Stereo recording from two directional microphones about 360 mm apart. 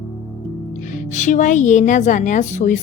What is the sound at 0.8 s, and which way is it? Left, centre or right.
A woman's voice, left.